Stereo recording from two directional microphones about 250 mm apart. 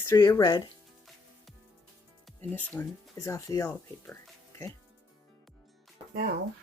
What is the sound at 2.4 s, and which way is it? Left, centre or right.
Speech, centre.